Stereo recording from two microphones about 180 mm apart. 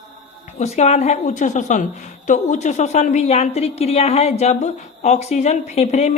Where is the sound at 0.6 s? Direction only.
40° left (ahead or behind).